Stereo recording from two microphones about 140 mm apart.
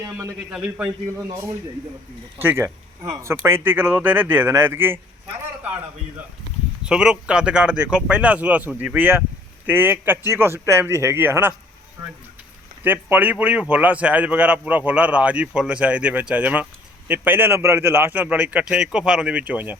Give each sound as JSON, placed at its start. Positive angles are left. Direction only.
{"t": 0.0, "sound": "a man's voice", "side_deg": -20}
{"t": 0.5, "sound": "a man's voice", "side_deg": -5}
{"t": 2.4, "sound": "speech", "side_deg": -15}
{"t": 6.8, "sound": "speech", "side_deg": -5}
{"t": 12.8, "sound": "speech", "side_deg": -15}